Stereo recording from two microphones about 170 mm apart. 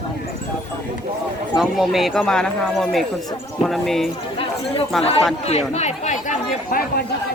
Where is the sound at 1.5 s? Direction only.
Centre (ahead or behind).